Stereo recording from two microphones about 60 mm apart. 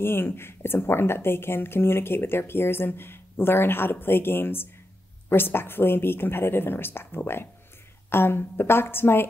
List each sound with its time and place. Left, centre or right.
0.0 s speech: left